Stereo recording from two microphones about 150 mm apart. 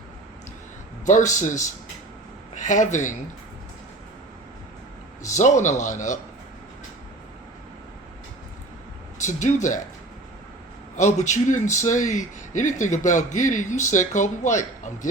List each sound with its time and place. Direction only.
1.0 s a man's voice: 55° left (ahead or behind)
5.2 s a man's voice: 55° left (ahead or behind)
9.1 s speech: 55° left (ahead or behind)
10.9 s a man's voice: 55° left (ahead or behind)